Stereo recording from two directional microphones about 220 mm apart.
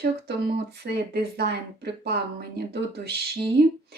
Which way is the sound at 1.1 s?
45° right (ahead or behind).